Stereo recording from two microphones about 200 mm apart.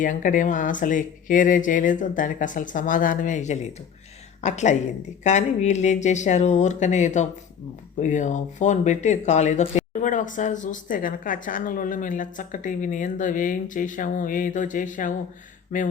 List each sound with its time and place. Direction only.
0.0 s a woman's voice: 40° left (ahead or behind)